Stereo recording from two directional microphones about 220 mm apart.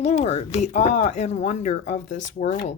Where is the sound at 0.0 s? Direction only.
30° left (ahead or behind).